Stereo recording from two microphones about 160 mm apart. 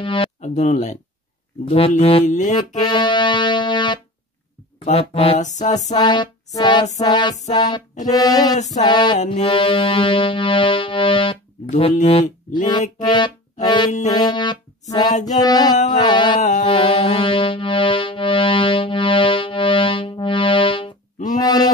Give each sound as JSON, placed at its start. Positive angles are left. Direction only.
{"t": 0.0, "sound": "music", "side_deg": 30}
{"t": 0.4, "sound": "speech", "side_deg": 45}
{"t": 1.7, "sound": "music", "side_deg": 40}
{"t": 2.8, "sound": "music", "side_deg": 30}
{"t": 4.8, "sound": "music", "side_deg": 40}
{"t": 5.9, "sound": "music", "side_deg": 25}
{"t": 11.7, "sound": "music", "side_deg": 40}
{"t": 13.0, "sound": "music", "side_deg": 25}
{"t": 16.3, "sound": "music", "side_deg": 50}
{"t": 16.6, "sound": "music", "side_deg": 30}
{"t": 21.4, "sound": "a sound", "side_deg": 25}